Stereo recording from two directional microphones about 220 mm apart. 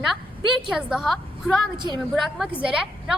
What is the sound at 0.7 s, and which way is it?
A woman's voice, 5° right (ahead or behind).